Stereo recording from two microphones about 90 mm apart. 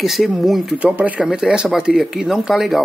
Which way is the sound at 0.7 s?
15° right (ahead or behind).